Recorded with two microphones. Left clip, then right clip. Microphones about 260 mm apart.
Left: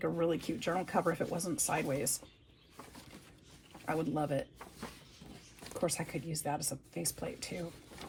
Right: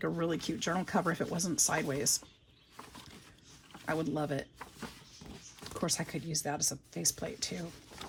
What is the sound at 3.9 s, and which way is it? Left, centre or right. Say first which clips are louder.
Speech: even; right.